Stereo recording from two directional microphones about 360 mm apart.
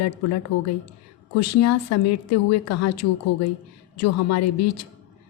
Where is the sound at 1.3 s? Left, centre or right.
Left.